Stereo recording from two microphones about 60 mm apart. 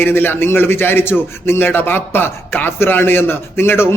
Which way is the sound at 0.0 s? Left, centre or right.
Left.